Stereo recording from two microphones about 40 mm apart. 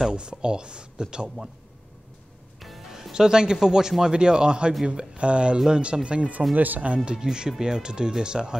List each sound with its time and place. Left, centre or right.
0.1 s speech: right
2.6 s music: centre
4.0 s speech: right
6.5 s speech: right
7.2 s speech: centre